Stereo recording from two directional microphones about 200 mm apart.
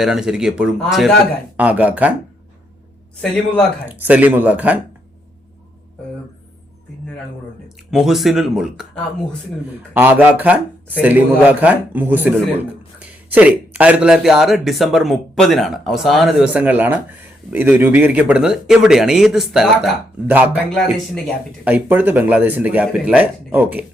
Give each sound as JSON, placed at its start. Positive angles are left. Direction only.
{"t": 0.0, "sound": "speech", "side_deg": 0}
{"t": 3.2, "sound": "speech", "side_deg": 5}
{"t": 3.8, "sound": "speech", "side_deg": -10}
{"t": 7.9, "sound": "speech", "side_deg": 0}
{"t": 9.9, "sound": "speech", "side_deg": -10}